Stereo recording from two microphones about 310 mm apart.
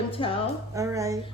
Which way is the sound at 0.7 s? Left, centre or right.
Centre.